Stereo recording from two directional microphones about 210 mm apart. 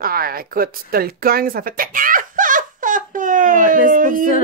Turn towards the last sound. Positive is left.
turn(degrees=-40)  # may be behind; listen again after turning